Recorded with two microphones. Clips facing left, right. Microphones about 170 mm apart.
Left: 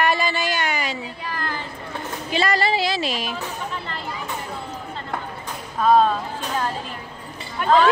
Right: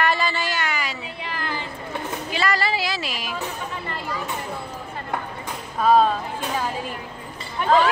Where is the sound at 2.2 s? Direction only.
25° left (ahead or behind).